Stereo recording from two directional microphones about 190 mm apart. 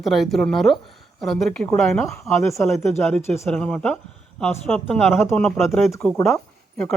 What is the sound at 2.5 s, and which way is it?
Speech, 15° left (ahead or behind).